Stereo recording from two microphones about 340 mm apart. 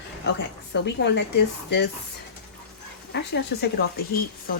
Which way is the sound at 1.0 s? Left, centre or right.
Left.